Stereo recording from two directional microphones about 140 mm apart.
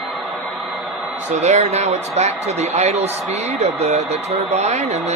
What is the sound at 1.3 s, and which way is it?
Speech, 55° right (ahead or behind).